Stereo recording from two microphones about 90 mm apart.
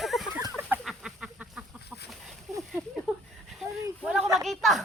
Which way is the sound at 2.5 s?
Centre (ahead or behind).